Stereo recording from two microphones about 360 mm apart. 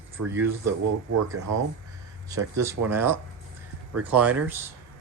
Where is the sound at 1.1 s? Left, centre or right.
Right.